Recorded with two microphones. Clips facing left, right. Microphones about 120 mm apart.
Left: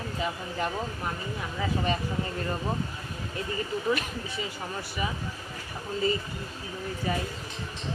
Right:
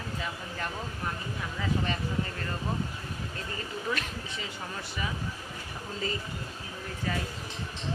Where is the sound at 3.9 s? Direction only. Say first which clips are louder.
Left 3 dB; 5° left (ahead or behind).